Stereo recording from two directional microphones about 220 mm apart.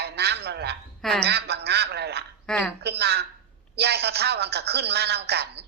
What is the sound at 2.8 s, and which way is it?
A woman's voice, 50° right (ahead or behind).